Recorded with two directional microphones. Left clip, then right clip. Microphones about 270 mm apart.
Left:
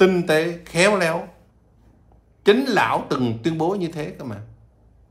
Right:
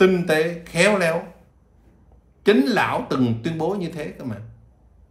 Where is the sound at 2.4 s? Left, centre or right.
Centre.